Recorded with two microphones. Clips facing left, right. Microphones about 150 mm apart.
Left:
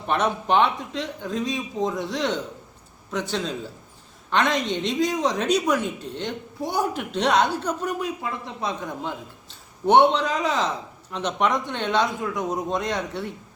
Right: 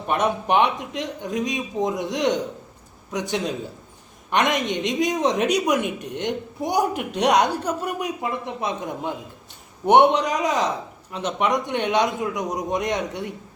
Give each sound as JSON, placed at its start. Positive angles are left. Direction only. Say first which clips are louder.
{"t": 0.1, "sound": "a woman's voice", "louder": "right 1 dB", "side_deg": -10}
{"t": 8.2, "sound": "a woman's voice", "louder": "right 3 dB", "side_deg": -20}